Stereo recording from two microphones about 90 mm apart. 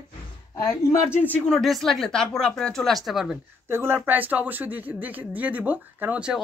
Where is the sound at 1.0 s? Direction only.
25° left (ahead or behind).